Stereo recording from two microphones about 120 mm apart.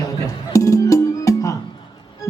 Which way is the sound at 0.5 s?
25° left (ahead or behind).